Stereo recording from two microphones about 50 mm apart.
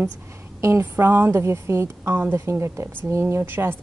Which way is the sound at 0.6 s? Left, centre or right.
Right.